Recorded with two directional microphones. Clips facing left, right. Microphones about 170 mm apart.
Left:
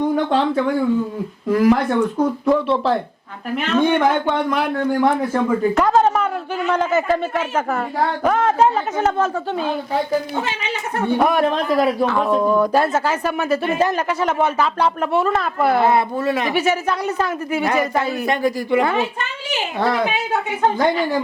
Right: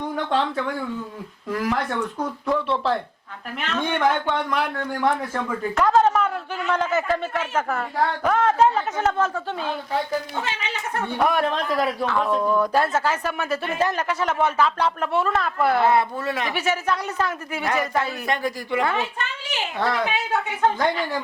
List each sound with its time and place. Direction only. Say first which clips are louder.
0.1 s a man's voice: left 6 dB; 10° left (ahead or behind)
2.1 s speech: left 7 dB; 35° left (ahead or behind)
3.6 s a man's voice: left 6 dB; 10° left (ahead or behind)
12.4 s speech: left 5 dB; 35° left (ahead or behind)
12.7 s a man's voice: left 4 dB; 10° left (ahead or behind)